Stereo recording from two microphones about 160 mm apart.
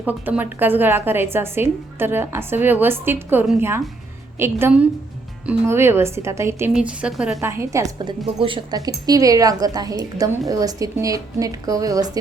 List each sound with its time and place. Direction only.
0.0 s a woman's voice: 10° right (ahead or behind)
6.7 s a woman's voice: 5° right (ahead or behind)
7.4 s a woman's voice: 15° right (ahead or behind)